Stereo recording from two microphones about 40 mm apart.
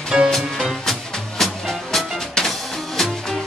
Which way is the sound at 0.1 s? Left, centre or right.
Centre.